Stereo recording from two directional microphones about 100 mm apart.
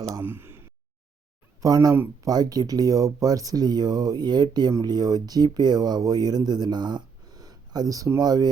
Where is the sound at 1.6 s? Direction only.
35° right (ahead or behind).